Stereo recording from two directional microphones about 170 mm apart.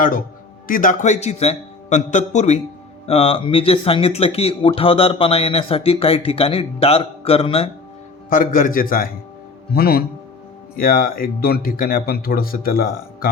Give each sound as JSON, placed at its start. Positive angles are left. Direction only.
{"t": 0.7, "sound": "a man's voice", "side_deg": 50}
{"t": 8.3, "sound": "a man's voice", "side_deg": 50}